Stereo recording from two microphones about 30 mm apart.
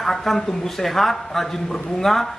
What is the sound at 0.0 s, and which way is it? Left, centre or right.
Speech, centre.